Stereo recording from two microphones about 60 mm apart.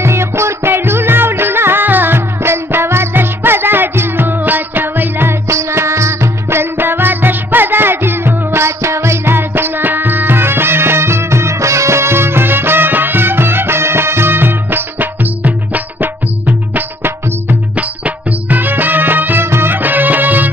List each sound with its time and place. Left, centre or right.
0.0 s music: right